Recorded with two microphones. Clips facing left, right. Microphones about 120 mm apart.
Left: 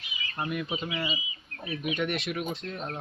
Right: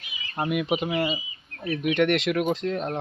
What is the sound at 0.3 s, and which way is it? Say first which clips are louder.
Speech: right 7 dB; 75° right (ahead or behind).